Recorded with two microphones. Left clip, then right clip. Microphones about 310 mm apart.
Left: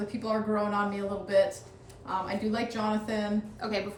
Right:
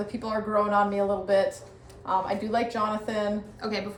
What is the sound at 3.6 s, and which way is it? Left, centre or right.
Speech, centre.